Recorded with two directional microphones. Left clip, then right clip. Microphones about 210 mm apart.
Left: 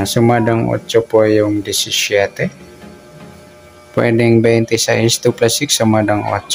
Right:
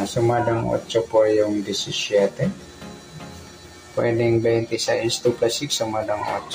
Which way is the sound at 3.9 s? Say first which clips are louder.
Left 7 dB; 40° left (ahead or behind).